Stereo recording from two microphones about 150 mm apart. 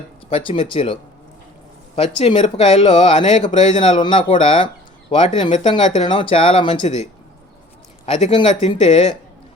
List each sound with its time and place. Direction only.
0.3 s speech: 40° left (ahead or behind)
2.0 s speech: 40° left (ahead or behind)